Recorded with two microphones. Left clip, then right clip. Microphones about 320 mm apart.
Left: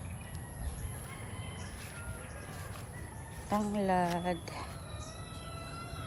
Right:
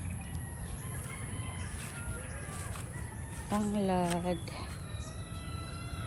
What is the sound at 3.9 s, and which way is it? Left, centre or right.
Speech, centre.